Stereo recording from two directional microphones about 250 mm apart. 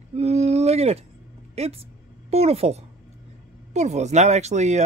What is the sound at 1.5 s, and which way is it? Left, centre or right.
Speech, right.